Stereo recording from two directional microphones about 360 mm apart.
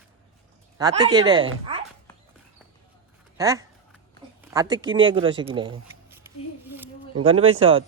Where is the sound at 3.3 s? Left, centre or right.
Centre.